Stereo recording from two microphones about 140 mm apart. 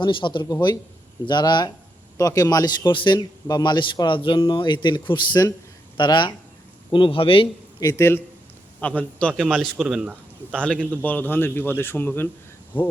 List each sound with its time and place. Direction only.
0.0 s a man's voice: 35° left (ahead or behind)
7.8 s a man's voice: 25° left (ahead or behind); by 10.2 s 5° right (ahead or behind)
10.5 s a man's voice: 10° left (ahead or behind)
12.7 s a man's voice: 35° left (ahead or behind)